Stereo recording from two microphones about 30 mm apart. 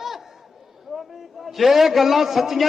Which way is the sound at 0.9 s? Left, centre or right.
Centre.